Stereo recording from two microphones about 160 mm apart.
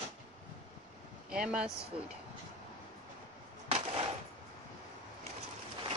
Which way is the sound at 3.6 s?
40° right (ahead or behind).